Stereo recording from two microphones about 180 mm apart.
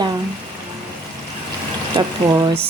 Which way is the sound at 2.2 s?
30° right (ahead or behind).